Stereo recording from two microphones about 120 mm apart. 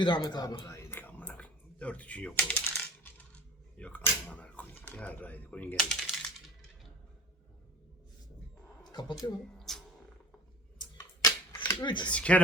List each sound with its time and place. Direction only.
0.0 s a man's voice: 40° left (ahead or behind)
0.8 s typing: 15° left (ahead or behind)
8.8 s speech: 35° left (ahead or behind)
9.6 s a sound: 5° left (ahead or behind)
10.8 s a sound: 30° left (ahead or behind)
11.8 s a man's voice: 40° left (ahead or behind)
12.1 s speech: 10° left (ahead or behind)